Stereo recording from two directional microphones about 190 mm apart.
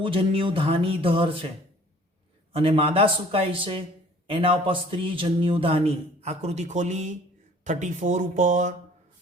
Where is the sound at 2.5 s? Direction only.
30° right (ahead or behind).